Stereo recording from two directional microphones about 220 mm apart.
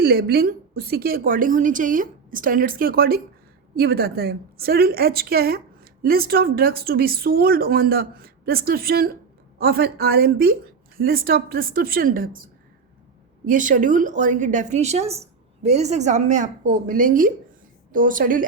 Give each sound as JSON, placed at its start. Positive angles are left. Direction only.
{"t": 0.0, "sound": "a woman's voice", "side_deg": -45}